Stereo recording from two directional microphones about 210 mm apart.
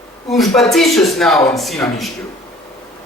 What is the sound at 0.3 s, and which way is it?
A man's voice, centre (ahead or behind).